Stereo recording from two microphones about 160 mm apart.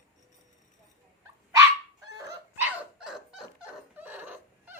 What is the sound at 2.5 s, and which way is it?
Dog, 10° right (ahead or behind).